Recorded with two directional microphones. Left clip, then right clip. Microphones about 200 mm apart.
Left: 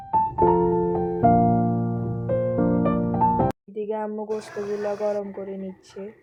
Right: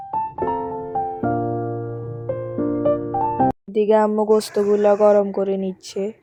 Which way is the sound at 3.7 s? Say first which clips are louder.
Right 12 dB; 50° right (ahead or behind).